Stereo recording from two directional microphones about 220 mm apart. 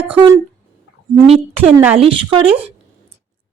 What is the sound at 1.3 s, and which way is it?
Speech, 25° right (ahead or behind).